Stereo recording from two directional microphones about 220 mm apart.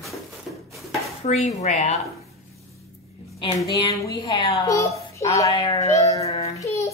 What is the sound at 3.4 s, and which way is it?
A woman's voice, 15° left (ahead or behind).